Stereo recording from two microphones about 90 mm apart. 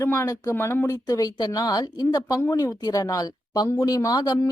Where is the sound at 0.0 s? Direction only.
30° left (ahead or behind).